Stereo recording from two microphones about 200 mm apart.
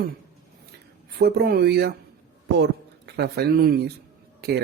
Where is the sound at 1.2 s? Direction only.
50° right (ahead or behind).